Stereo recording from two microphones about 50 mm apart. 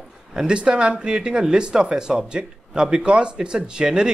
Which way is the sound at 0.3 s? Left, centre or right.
Centre.